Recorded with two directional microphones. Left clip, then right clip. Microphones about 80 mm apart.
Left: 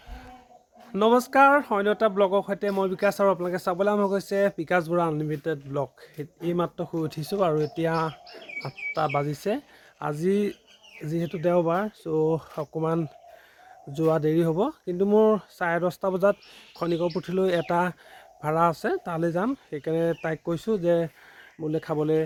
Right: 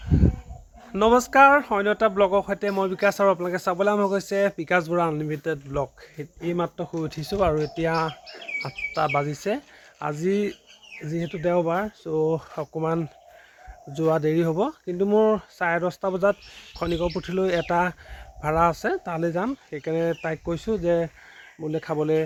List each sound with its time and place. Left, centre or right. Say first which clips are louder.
0.9 s speech: right 3 dB; centre
6.4 s speech: right 1 dB; left
7.0 s speech: right 2 dB; centre
11.0 s speech: even; left
12.5 s speech: right 1 dB; centre
21.8 s speech: right 2 dB; centre